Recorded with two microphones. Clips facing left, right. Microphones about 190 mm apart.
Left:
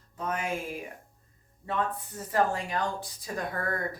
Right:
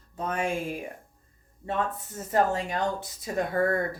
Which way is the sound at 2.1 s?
25° right (ahead or behind).